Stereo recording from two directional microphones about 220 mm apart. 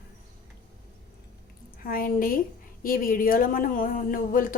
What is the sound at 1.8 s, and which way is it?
Speech, 40° left (ahead or behind).